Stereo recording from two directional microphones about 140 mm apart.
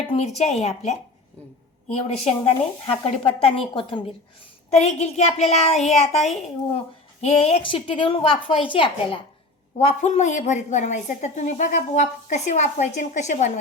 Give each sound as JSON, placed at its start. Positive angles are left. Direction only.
{"t": 0.1, "sound": "a woman's voice", "side_deg": 50}
{"t": 1.9, "sound": "a woman's voice", "side_deg": 50}
{"t": 4.7, "sound": "a woman's voice", "side_deg": 50}
{"t": 7.6, "sound": "a woman's voice", "side_deg": 35}
{"t": 9.8, "sound": "a woman's voice", "side_deg": 55}